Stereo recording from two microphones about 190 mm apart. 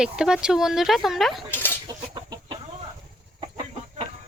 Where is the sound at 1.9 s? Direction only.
20° right (ahead or behind).